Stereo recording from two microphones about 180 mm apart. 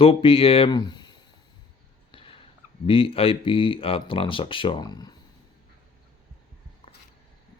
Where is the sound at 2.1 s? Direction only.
30° left (ahead or behind).